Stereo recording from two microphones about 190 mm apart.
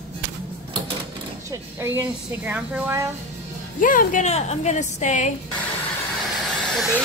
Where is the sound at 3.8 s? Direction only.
45° left (ahead or behind).